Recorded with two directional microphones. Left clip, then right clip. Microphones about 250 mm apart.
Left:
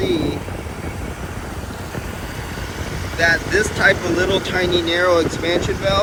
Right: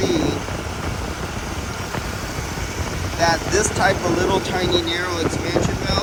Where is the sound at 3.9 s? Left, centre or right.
Centre.